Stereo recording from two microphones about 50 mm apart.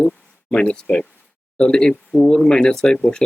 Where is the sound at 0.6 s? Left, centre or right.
Left.